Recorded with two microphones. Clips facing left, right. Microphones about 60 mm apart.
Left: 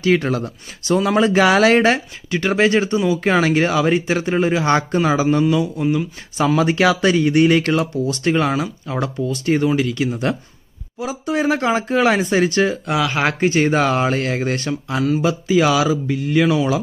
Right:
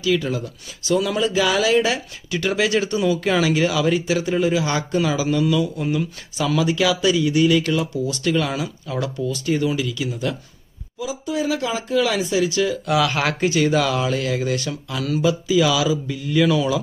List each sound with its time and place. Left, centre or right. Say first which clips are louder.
0.0 s speech: left 4 dB; left
2.3 s speech: left 4 dB; left
5.8 s speech: left 4 dB; centre
6.3 s speech: left 4 dB; left
9.3 s speech: left 5 dB; left
11.0 s speech: left 3 dB; left
13.4 s speech: left 2 dB; left